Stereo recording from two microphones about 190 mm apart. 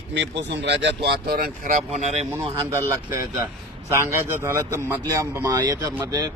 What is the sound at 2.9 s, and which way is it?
A man's voice, 15° right (ahead or behind).